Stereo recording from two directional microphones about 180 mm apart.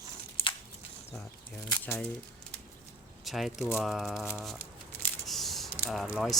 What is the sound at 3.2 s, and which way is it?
Speech, centre (ahead or behind).